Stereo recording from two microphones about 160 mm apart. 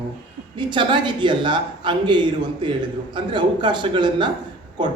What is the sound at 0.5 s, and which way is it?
A man's voice, 30° right (ahead or behind).